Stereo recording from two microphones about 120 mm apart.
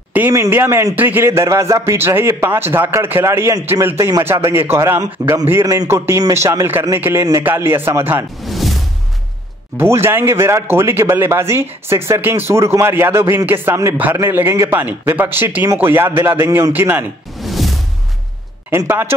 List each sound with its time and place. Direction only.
0.3 s a man's voice: 20° right (ahead or behind)
8.5 s music: centre (ahead or behind)
9.8 s a man's voice: 20° right (ahead or behind)
17.4 s music: centre (ahead or behind)
18.7 s a man's voice: 20° right (ahead or behind)